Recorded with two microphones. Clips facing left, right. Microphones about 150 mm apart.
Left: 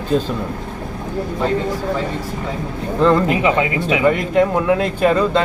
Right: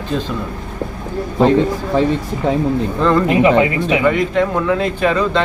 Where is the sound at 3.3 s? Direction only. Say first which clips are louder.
Right 4 dB; 20° right (ahead or behind).